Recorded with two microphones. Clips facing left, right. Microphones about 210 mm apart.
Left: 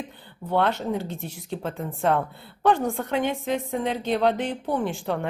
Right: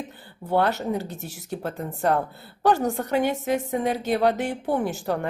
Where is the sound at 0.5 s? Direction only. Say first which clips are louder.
Right 1 dB; 5° right (ahead or behind).